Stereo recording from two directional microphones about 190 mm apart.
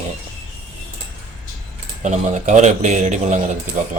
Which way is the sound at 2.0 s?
40° right (ahead or behind).